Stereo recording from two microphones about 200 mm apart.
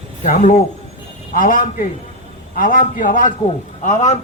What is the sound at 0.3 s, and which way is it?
A man's voice, 40° left (ahead or behind).